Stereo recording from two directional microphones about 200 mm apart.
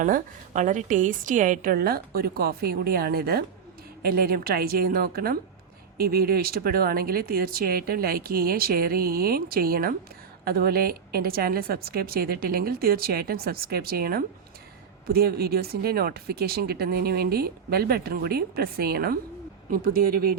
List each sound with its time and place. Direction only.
0.0 s speech: 40° right (ahead or behind)